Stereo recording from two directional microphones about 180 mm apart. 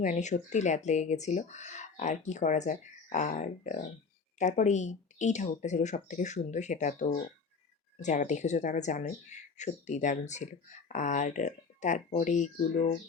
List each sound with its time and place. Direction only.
0.0 s speech: 45° left (ahead or behind)